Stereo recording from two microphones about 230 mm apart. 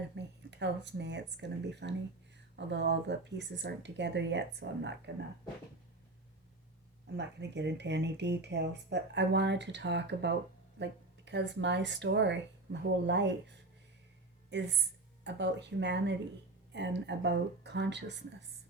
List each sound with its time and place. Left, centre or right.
0.1 s speech: right
7.2 s speech: right